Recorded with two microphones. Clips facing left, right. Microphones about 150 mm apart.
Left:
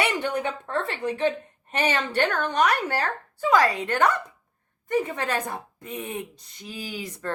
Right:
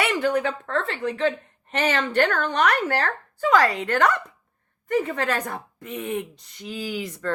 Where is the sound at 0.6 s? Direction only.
15° left (ahead or behind).